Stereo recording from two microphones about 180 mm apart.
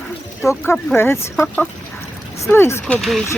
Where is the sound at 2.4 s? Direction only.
15° left (ahead or behind).